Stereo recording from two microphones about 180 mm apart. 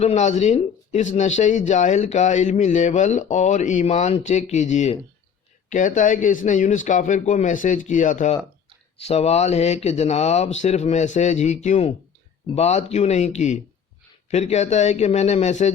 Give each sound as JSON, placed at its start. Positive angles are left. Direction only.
{"t": 0.0, "sound": "speech", "side_deg": 40}